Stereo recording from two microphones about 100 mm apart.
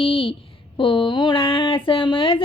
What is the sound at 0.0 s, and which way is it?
Speech, 65° left (ahead or behind).